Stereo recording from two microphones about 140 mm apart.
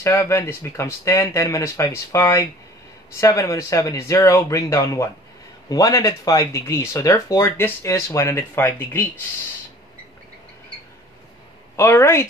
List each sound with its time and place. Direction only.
0.0 s speech: 20° left (ahead or behind)
11.7 s speech: 20° left (ahead or behind)